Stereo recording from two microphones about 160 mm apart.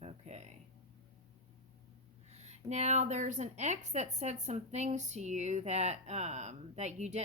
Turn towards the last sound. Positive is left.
turn(degrees=-45)  # may be behind; listen again after turning